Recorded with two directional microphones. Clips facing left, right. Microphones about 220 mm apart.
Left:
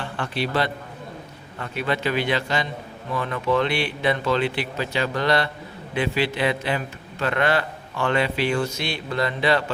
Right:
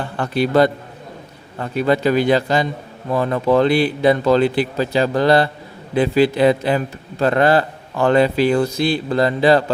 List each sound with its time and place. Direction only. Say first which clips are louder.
0.0 s a man's voice: right 7 dB; 40° right (ahead or behind)